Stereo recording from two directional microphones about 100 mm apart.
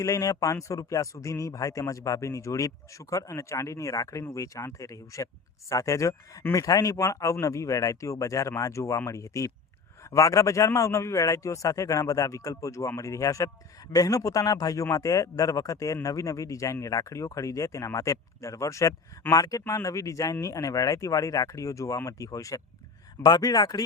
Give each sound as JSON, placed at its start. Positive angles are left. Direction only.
{"t": 0.0, "sound": "speech", "side_deg": 30}